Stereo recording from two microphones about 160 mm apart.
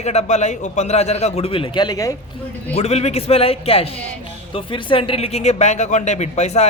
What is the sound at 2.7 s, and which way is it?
A man's voice, 40° left (ahead or behind).